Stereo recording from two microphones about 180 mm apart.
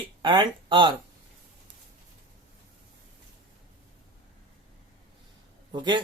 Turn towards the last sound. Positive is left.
turn(degrees=-25)  # may be behind; listen again after turning